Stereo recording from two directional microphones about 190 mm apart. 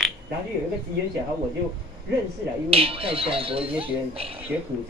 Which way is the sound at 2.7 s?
30° right (ahead or behind).